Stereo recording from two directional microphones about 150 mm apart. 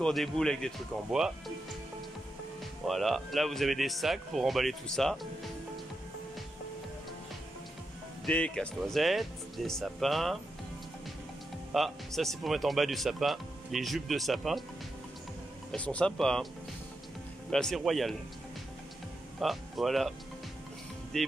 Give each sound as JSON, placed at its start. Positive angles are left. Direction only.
{"t": 0.0, "sound": "speech", "side_deg": 5}
{"t": 2.9, "sound": "speech", "side_deg": 0}
{"t": 8.3, "sound": "speech", "side_deg": 5}
{"t": 11.7, "sound": "speech", "side_deg": 0}
{"t": 15.7, "sound": "speech", "side_deg": 10}
{"t": 17.5, "sound": "speech", "side_deg": 5}
{"t": 19.4, "sound": "speech", "side_deg": 0}